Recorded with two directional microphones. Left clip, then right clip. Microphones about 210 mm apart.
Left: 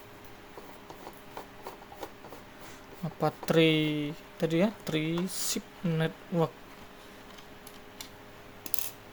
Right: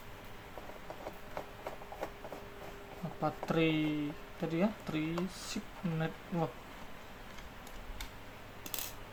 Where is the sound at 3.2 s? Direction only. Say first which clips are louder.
Left 7 dB; 45° left (ahead or behind).